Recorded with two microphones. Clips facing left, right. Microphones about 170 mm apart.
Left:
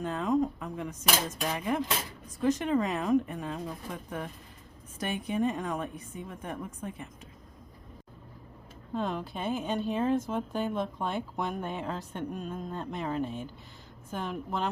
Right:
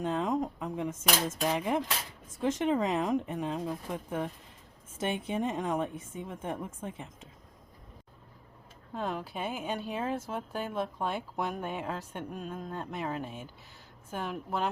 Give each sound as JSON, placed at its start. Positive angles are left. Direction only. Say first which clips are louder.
{"t": 0.0, "sound": "a woman's voice", "louder": "left 2 dB", "side_deg": -20}
{"t": 8.9, "sound": "a woman's voice", "louder": "left 2 dB", "side_deg": -5}